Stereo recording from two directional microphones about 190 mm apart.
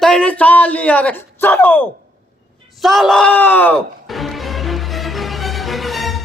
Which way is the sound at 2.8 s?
Centre (ahead or behind).